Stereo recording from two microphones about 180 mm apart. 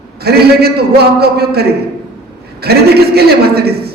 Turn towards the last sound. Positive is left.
turn(degrees=-60)  # may be behind; listen again after turning